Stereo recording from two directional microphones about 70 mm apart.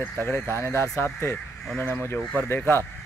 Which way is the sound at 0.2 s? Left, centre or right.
Left.